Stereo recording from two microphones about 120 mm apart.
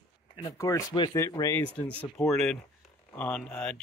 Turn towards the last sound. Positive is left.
turn(degrees=10)  # may be behind; listen again after turning